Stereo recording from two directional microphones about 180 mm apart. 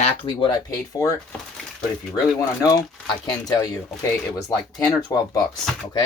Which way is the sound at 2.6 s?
20° left (ahead or behind).